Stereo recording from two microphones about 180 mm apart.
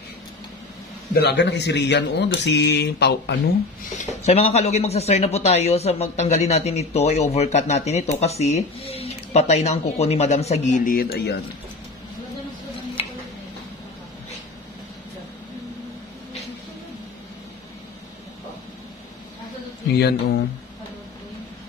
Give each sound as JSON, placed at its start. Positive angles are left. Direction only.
{"t": 1.1, "sound": "speech", "side_deg": 70}
{"t": 4.0, "sound": "speech", "side_deg": 40}
{"t": 20.0, "sound": "speech", "side_deg": 65}